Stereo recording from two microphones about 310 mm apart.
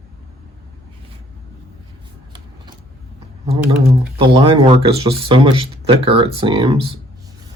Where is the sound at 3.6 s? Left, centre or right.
Centre.